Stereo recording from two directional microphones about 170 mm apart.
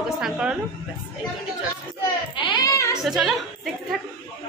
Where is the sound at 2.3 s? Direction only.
25° left (ahead or behind).